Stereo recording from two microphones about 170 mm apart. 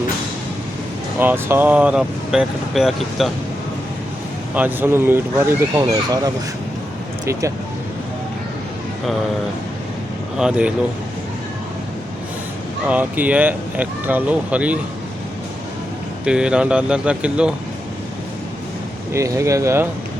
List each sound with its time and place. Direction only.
1.2 s speech: 10° right (ahead or behind)
4.5 s speech: 10° right (ahead or behind)
10.3 s speech: 5° right (ahead or behind)
12.9 s speech: 10° right (ahead or behind)
16.2 s speech: 5° right (ahead or behind)
19.1 s speech: 15° right (ahead or behind)